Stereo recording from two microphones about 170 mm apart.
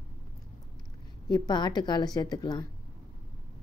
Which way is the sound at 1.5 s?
25° left (ahead or behind).